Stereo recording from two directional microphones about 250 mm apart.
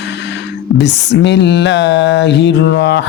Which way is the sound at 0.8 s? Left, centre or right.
Left.